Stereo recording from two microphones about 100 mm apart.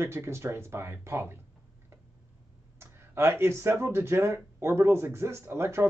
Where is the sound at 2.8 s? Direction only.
25° right (ahead or behind).